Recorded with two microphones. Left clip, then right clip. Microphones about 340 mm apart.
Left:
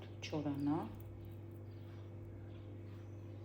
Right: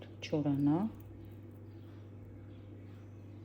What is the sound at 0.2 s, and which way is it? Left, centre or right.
Speech, right.